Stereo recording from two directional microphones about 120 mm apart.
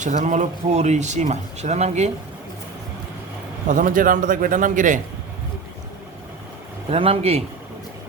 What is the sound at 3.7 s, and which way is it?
A man's voice, 90° right.